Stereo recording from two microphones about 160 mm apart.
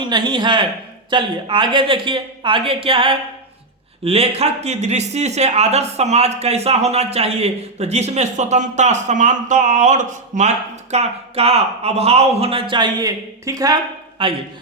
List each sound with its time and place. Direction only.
0.0 s speech: 30° right (ahead or behind)
14.2 s speech: 35° right (ahead or behind)